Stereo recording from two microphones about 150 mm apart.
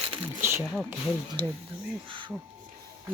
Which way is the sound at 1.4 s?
35° right (ahead or behind).